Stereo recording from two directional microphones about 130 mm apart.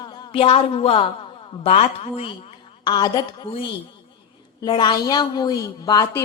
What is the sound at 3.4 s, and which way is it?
A woman's voice, 45° left (ahead or behind).